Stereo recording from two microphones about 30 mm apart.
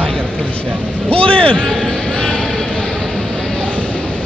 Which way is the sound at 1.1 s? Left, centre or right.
Left.